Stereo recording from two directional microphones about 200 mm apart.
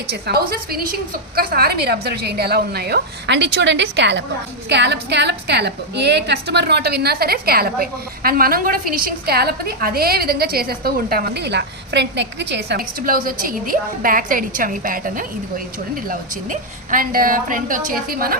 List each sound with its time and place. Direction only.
0.1 s a woman's voice: 50° right (ahead or behind)